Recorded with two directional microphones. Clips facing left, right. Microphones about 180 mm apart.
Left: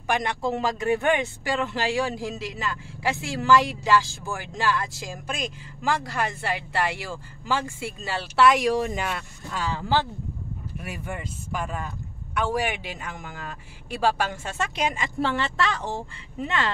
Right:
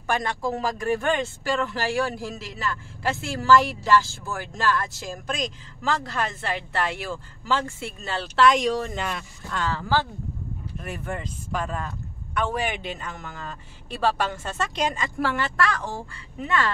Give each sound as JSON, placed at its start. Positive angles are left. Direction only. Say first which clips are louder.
{"t": 0.0, "sound": "speech", "louder": "even", "side_deg": 15}
{"t": 15.1, "sound": "a woman's voice", "louder": "even", "side_deg": 25}